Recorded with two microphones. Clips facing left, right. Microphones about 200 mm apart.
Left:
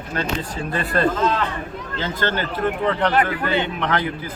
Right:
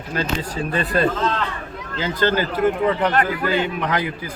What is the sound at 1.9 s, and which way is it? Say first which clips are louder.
A man's voice: right 4 dB; 10° right (ahead or behind).